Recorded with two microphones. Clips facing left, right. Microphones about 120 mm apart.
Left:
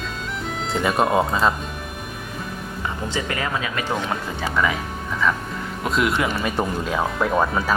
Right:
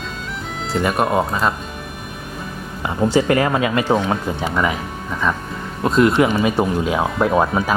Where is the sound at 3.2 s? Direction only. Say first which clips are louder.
Right 11 dB; 35° right (ahead or behind).